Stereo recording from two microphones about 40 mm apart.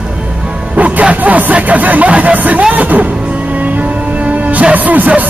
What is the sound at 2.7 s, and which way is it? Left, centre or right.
Music, right.